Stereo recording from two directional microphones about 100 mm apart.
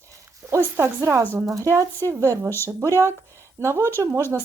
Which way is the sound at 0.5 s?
30° right (ahead or behind).